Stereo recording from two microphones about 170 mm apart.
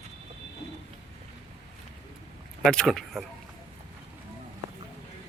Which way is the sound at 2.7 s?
5° left (ahead or behind).